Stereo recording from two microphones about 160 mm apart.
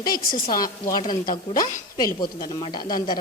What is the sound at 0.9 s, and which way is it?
A man's voice, 25° left (ahead or behind).